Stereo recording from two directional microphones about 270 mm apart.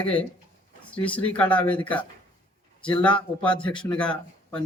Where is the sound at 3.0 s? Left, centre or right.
Centre.